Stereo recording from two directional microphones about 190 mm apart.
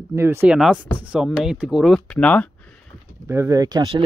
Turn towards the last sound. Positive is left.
turn(degrees=-25)  # may be behind; listen again after turning